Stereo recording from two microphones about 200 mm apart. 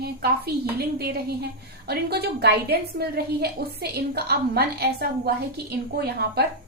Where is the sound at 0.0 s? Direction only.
55° right (ahead or behind).